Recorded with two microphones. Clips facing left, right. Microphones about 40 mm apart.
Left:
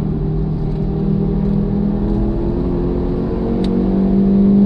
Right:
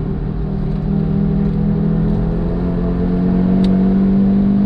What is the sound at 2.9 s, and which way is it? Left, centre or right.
Vehicle, centre.